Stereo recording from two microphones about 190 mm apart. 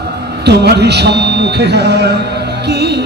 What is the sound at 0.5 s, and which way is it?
Speech, 60° right (ahead or behind).